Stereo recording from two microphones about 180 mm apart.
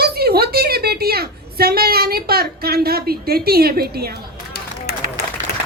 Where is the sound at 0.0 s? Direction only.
60° right (ahead or behind).